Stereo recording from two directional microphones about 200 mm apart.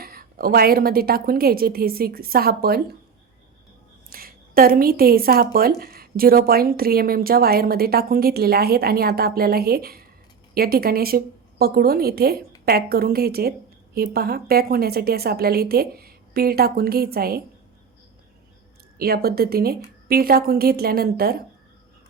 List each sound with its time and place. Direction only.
0.0 s a woman's voice: 50° right (ahead or behind)
4.1 s a woman's voice: 45° right (ahead or behind)
18.9 s a woman's voice: 50° right (ahead or behind)